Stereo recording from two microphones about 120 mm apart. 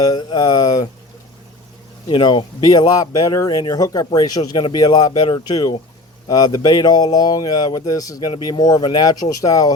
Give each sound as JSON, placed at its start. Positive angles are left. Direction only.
{"t": 0.0, "sound": "speech", "side_deg": 35}
{"t": 2.0, "sound": "speech", "side_deg": 45}